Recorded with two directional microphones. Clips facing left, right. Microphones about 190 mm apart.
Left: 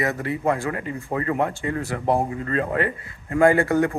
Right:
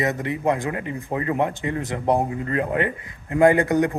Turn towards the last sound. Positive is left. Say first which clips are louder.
# right 1 dB
turn(degrees=-20)  # may be behind; listen again after turning